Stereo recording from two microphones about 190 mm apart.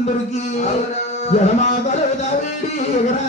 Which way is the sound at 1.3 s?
35° left (ahead or behind).